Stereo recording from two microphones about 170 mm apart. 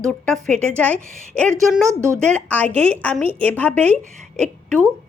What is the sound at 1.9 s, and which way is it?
Speech, 15° right (ahead or behind).